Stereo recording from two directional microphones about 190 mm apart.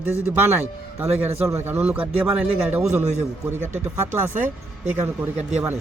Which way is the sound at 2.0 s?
30° right (ahead or behind).